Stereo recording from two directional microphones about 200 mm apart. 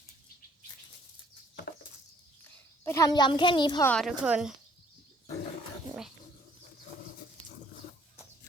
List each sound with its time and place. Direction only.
2.8 s a child's voice: 15° left (ahead or behind)
3.8 s speech: 5° left (ahead or behind)